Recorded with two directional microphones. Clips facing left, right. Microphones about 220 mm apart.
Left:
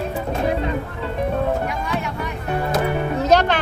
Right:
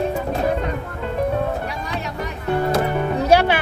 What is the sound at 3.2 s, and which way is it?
Music, 10° right (ahead or behind).